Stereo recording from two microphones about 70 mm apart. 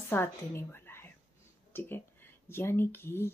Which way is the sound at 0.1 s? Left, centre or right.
Left.